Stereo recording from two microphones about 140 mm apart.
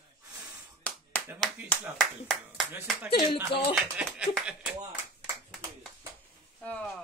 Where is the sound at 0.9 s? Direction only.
10° left (ahead or behind).